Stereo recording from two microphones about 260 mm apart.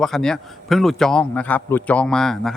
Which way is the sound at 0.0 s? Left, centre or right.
Centre.